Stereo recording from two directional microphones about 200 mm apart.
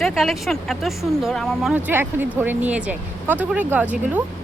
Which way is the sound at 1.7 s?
10° right (ahead or behind).